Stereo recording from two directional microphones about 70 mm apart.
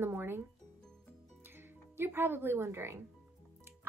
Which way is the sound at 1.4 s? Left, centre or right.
Right.